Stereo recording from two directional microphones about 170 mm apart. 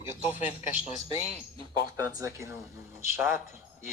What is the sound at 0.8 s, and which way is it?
Speech, 40° left (ahead or behind).